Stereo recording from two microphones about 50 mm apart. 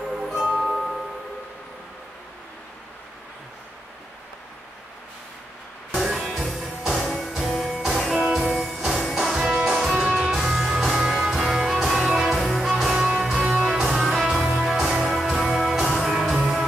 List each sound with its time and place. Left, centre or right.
0.1 s music: centre
5.9 s music: centre
9.9 s music: centre
13.2 s music: centre
13.7 s music: centre